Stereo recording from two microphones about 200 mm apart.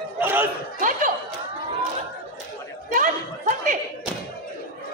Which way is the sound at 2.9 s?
40° right (ahead or behind).